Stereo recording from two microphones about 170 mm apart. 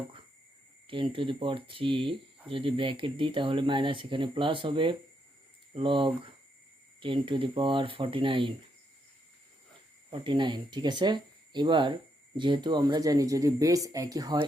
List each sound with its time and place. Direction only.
0.9 s speech: 30° right (ahead or behind)
10.1 s speech: 30° right (ahead or behind)